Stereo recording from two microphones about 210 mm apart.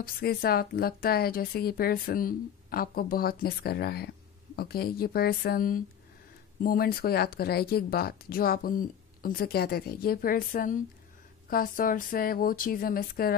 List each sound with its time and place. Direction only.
0.0 s speech: 45° left (ahead or behind)